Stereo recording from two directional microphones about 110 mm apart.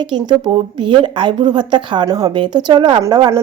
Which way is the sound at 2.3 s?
50° right (ahead or behind).